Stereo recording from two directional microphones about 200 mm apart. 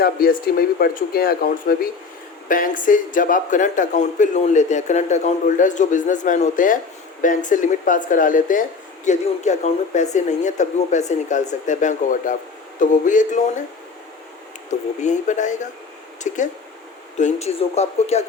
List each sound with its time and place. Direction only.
0.0 s a man's voice: 45° left (ahead or behind)
14.7 s a man's voice: 35° left (ahead or behind)